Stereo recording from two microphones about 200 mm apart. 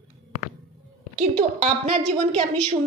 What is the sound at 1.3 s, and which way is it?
Speech, 30° right (ahead or behind).